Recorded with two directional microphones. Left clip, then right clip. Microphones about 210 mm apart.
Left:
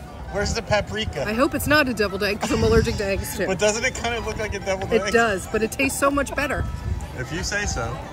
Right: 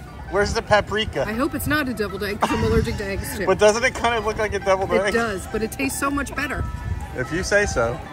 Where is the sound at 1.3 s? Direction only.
20° left (ahead or behind).